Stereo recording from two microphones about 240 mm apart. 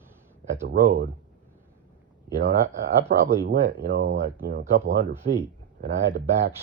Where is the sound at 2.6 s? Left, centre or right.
Right.